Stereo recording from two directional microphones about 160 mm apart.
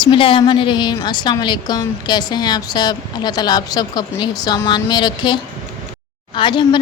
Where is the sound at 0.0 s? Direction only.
35° left (ahead or behind).